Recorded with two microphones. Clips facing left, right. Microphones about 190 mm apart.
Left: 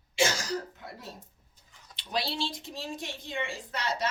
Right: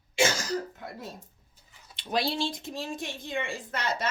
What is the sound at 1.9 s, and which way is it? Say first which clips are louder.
A woman's voice: right 4 dB; 50° right (ahead or behind).